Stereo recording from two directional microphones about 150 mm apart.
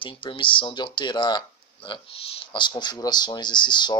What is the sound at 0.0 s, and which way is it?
Speech, 35° left (ahead or behind).